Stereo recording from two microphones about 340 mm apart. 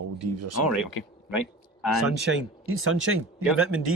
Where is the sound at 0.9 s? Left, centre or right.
Left.